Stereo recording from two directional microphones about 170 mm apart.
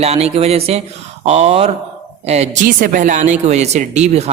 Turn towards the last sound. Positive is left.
turn(degrees=-40)  # may be behind; listen again after turning